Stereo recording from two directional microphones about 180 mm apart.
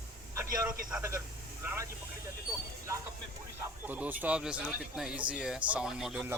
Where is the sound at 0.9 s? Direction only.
10° right (ahead or behind).